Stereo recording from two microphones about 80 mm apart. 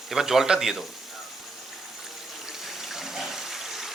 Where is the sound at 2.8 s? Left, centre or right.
Centre.